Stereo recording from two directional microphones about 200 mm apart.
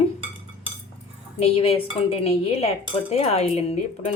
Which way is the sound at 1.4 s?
30° left (ahead or behind).